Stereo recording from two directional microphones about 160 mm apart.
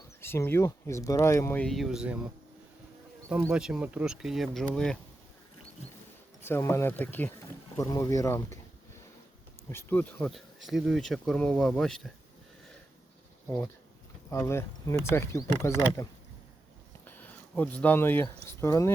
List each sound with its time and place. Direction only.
0.2 s speech: 15° left (ahead or behind)
1.6 s speech: centre (ahead or behind)
3.5 s speech: 5° right (ahead or behind)
6.4 s speech: 15° left (ahead or behind)
9.6 s speech: 15° left (ahead or behind)
14.3 s speech: 15° left (ahead or behind)
17.1 s a sound: 10° left (ahead or behind)
18.4 s speech: 20° left (ahead or behind)